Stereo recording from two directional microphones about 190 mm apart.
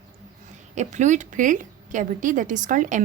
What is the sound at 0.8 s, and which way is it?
A woman's voice, 40° right (ahead or behind).